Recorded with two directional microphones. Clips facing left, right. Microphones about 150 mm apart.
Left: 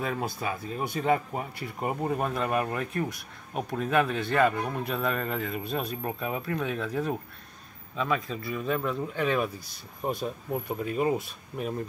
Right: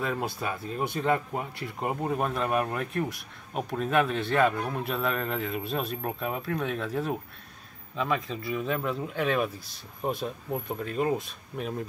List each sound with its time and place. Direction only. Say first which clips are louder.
0.0 s speech: even; centre (ahead or behind)